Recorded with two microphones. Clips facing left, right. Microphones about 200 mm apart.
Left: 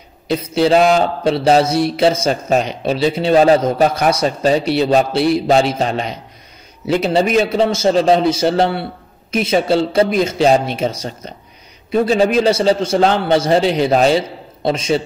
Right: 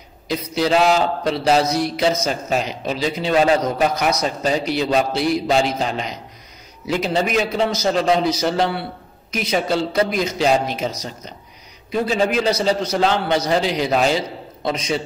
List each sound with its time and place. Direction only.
0.3 s a man's voice: 30° left (ahead or behind)
7.2 s a man's voice: 30° left (ahead or behind)